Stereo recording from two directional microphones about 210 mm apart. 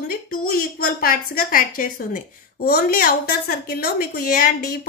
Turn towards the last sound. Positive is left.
turn(degrees=45)  # may be behind; listen again after turning